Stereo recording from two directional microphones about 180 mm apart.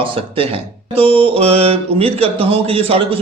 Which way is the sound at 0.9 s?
30° right (ahead or behind).